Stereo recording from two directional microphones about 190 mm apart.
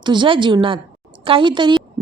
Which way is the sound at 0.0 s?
25° right (ahead or behind).